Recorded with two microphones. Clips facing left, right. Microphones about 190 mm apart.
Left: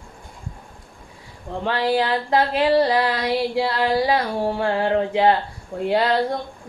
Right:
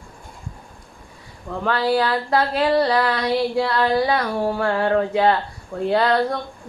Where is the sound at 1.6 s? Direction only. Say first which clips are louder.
Right 1 dB; 20° left (ahead or behind).